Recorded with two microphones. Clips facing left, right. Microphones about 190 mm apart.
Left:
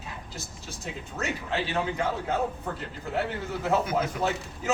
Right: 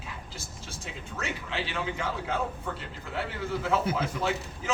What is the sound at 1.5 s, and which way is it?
Speech, 40° left (ahead or behind).